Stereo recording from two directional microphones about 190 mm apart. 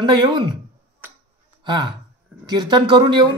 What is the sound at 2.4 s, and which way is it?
Speech, 20° right (ahead or behind).